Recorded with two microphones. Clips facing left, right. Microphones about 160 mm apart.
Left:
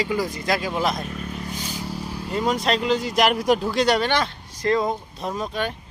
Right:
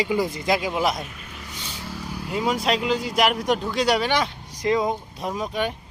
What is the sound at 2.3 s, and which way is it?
Speech, 5° right (ahead or behind).